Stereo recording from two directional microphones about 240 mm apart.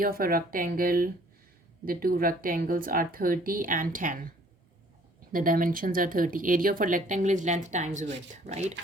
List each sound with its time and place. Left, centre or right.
0.0 s speech: right
5.3 s speech: right